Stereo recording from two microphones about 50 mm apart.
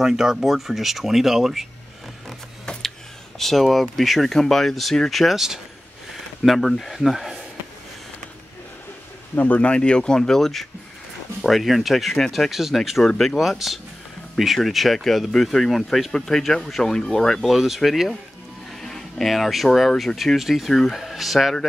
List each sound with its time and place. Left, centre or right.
0.0 s speech: centre
3.3 s speech: centre
9.3 s speech: left
9.8 s speech: centre